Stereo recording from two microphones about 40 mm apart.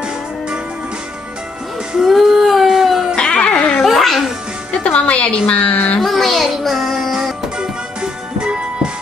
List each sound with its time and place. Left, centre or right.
2.0 s female singing: centre
3.3 s dog: left
3.8 s music: centre
4.9 s a woman's voice: left
5.9 s child singing: centre
7.5 s music: right